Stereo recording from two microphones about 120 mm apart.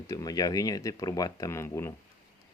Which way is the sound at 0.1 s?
30° left (ahead or behind).